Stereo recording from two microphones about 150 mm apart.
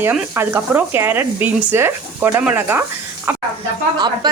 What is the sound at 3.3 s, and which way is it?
Snake, 15° right (ahead or behind).